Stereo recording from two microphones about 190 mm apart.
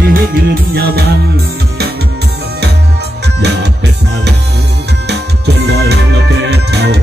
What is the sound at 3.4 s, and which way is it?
Music, 60° right (ahead or behind).